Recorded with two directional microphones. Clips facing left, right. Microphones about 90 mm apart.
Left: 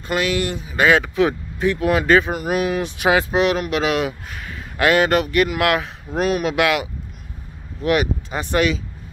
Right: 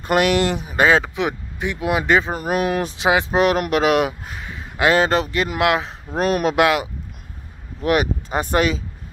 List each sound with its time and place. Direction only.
0.1 s speech: 60° right (ahead or behind); by 0.7 s 75° right (ahead or behind)
0.7 s speech: 30° right (ahead or behind)
1.1 s speech: 20° right (ahead or behind)
2.2 s speech: 40° right (ahead or behind)
3.0 s speech: 20° right (ahead or behind)
3.3 s speech: 45° right (ahead or behind)
4.4 s a sound: 20° right (ahead or behind)
4.9 s speech: 30° right (ahead or behind)
6.1 s speech: 40° right (ahead or behind)